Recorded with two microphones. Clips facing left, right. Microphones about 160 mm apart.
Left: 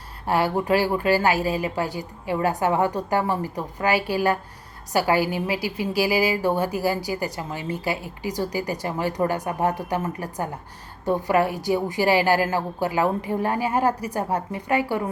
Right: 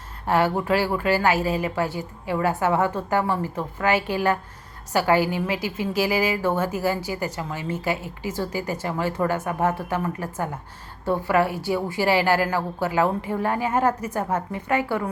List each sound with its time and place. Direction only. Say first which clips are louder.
0.3 s a woman's voice: even; 15° left (ahead or behind)